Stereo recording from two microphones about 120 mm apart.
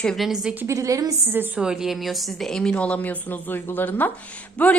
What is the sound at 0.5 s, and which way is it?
Speech, 25° right (ahead or behind).